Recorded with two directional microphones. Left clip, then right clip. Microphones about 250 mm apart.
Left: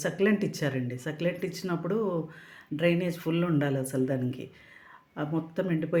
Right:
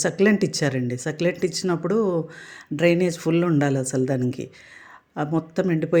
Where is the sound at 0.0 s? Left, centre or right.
Right.